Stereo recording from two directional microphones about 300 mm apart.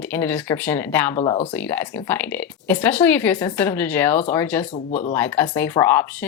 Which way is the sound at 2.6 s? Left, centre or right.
Centre.